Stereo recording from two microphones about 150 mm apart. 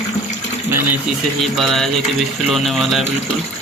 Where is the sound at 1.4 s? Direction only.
Centre (ahead or behind).